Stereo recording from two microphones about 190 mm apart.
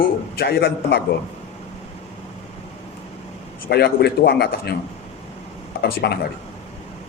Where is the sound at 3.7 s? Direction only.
55° left (ahead or behind).